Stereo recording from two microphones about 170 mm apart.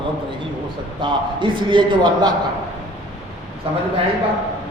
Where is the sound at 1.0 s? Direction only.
30° right (ahead or behind).